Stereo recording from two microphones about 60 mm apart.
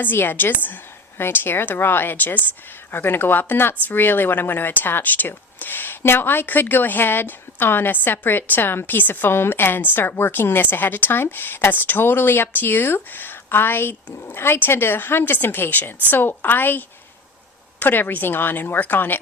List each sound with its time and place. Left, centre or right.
0.0 s speech: left